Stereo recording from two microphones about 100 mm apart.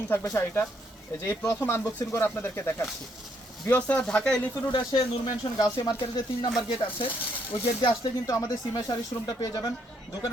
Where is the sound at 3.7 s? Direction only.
15° left (ahead or behind).